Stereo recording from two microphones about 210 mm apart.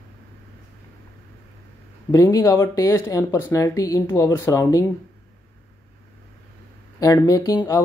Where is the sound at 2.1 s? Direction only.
15° left (ahead or behind).